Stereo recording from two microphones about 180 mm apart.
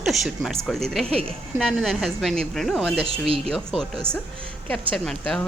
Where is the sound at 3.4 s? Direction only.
5° left (ahead or behind).